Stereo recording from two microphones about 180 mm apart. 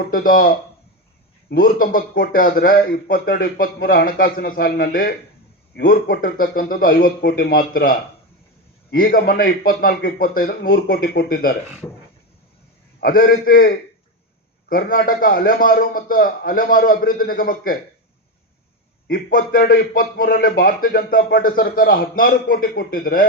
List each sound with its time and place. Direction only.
0.1 s a man's voice: 55° left (ahead or behind)
13.0 s speech: 55° left (ahead or behind)
19.0 s a man's voice: 55° left (ahead or behind)